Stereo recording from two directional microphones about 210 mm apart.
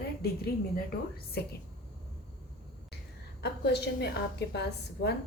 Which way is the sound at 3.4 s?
50° left (ahead or behind).